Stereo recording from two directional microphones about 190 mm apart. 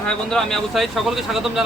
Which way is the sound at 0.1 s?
5° left (ahead or behind).